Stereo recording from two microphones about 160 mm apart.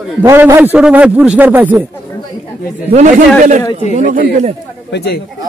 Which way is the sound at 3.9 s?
50° right (ahead or behind).